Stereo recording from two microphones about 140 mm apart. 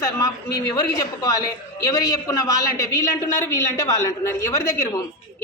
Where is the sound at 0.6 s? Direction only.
25° left (ahead or behind).